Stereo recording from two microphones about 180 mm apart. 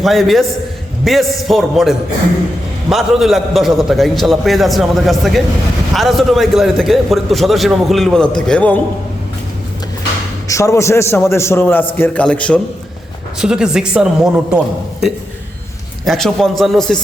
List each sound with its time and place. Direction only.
0.0 s a man's voice: centre (ahead or behind)
10.5 s a man's voice: 15° left (ahead or behind)
13.4 s a man's voice: 5° right (ahead or behind)
16.0 s a man's voice: centre (ahead or behind)